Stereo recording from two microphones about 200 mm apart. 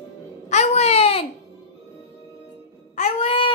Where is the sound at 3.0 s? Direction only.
30° left (ahead or behind).